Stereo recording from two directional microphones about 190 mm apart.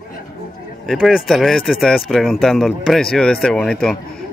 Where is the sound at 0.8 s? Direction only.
Centre (ahead or behind).